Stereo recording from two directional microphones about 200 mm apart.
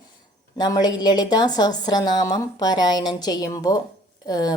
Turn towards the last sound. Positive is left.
turn(degrees=20)  # may be behind; listen again after turning